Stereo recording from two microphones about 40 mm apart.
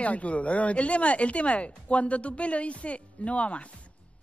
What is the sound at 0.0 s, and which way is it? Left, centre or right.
Speech, left.